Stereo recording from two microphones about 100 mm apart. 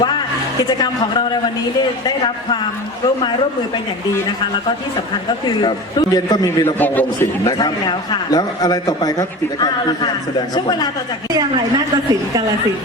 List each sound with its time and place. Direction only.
0.8 s a man's voice: 45° left (ahead or behind)
6.1 s a man's voice: 45° left (ahead or behind)
6.7 s a man's voice: 20° left (ahead or behind)
7.4 s a man's voice: 45° left (ahead or behind)